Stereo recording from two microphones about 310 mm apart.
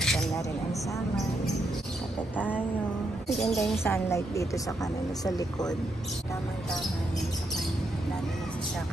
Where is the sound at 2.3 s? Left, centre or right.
Centre.